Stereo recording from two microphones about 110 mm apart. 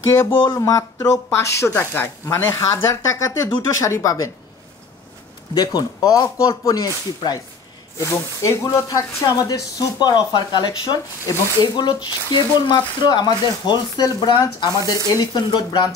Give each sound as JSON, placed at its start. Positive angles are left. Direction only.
{"t": 0.1, "sound": "speech", "side_deg": 25}
{"t": 5.5, "sound": "speech", "side_deg": 40}